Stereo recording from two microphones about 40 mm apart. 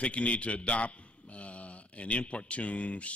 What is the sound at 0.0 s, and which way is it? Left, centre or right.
A man's voice, left.